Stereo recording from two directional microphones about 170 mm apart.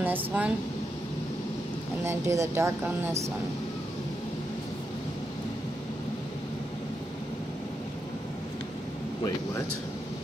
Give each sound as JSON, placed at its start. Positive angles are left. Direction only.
{"t": 0.0, "sound": "speech", "side_deg": -10}
{"t": 2.0, "sound": "speech", "side_deg": -15}